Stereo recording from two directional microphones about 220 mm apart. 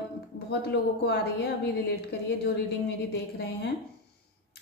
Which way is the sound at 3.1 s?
50° left (ahead or behind).